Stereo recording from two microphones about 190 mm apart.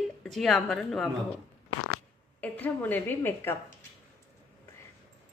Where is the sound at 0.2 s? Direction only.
Centre (ahead or behind).